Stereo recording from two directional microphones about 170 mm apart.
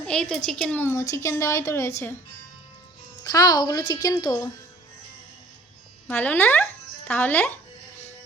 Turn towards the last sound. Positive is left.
turn(degrees=10)  # may be behind; listen again after turning